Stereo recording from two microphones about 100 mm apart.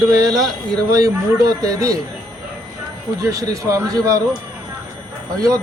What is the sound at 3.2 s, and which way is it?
Speech, 35° right (ahead or behind).